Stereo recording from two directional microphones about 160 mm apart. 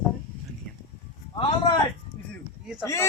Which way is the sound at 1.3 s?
30° left (ahead or behind).